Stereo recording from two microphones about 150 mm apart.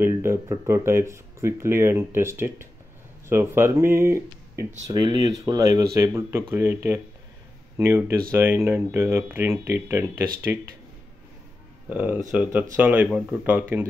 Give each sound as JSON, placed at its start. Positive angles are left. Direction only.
{"t": 0.0, "sound": "speech", "side_deg": -15}
{"t": 11.9, "sound": "speech", "side_deg": -10}